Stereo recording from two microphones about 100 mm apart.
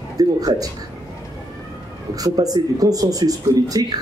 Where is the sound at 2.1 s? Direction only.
40° right (ahead or behind).